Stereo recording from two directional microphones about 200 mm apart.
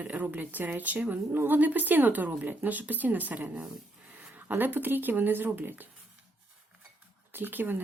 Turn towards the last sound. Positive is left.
turn(degrees=-10)  # may be behind; listen again after turning